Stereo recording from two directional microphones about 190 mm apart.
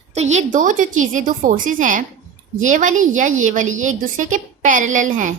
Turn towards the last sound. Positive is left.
turn(degrees=-40)  # may be behind; listen again after turning